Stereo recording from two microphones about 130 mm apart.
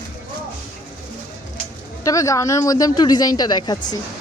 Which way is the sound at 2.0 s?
25° left (ahead or behind).